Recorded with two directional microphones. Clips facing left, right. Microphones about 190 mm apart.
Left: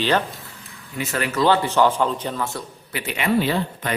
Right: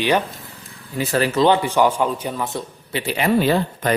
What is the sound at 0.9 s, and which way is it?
Speech, 35° right (ahead or behind).